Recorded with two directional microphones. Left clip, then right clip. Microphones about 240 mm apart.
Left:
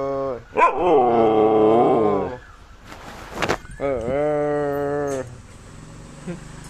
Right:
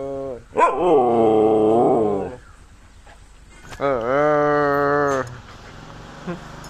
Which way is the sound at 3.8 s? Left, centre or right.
Centre.